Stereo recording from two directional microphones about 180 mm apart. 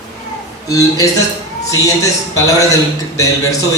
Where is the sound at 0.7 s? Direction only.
20° left (ahead or behind).